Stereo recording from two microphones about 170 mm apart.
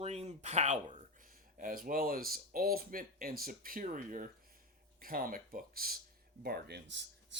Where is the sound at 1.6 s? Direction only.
55° right (ahead or behind).